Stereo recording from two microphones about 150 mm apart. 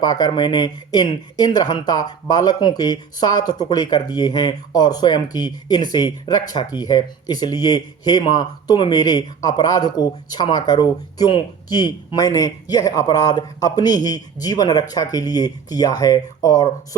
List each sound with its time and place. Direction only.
0.0 s speech: 25° left (ahead or behind)